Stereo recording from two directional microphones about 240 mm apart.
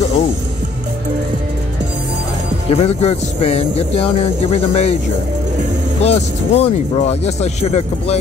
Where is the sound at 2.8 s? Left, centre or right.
Left.